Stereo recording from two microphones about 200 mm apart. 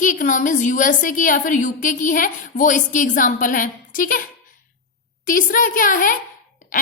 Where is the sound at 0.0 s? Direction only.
40° left (ahead or behind).